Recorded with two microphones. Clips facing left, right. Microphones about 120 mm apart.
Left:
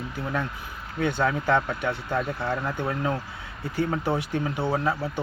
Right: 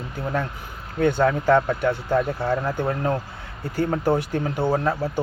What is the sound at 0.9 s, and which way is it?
Speech, 45° right (ahead or behind).